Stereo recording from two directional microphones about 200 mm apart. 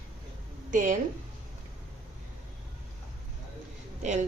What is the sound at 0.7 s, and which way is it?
Speech, 40° right (ahead or behind).